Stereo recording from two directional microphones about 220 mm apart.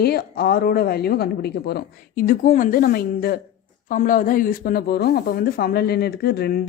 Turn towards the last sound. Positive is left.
turn(degrees=45)  # may be behind; listen again after turning